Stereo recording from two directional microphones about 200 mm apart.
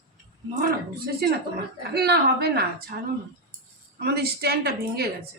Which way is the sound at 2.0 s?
50° right (ahead or behind).